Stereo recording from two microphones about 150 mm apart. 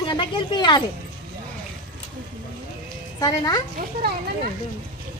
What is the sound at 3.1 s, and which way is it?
Speech, 25° left (ahead or behind).